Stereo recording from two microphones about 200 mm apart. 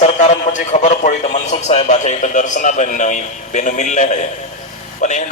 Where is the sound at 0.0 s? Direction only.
35° left (ahead or behind).